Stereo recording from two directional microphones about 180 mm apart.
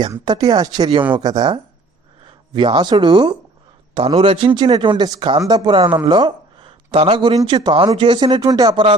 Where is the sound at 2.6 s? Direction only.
25° right (ahead or behind).